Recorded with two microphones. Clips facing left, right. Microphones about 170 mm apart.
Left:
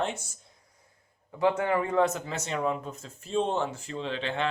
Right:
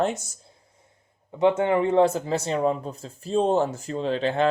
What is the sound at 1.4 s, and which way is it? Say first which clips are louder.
Speech: right 5 dB; 25° right (ahead or behind).